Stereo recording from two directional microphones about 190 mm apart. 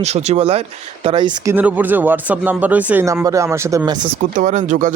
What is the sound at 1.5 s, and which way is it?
Speech, 10° right (ahead or behind).